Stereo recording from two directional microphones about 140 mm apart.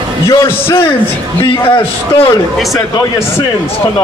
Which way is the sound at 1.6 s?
40° left (ahead or behind).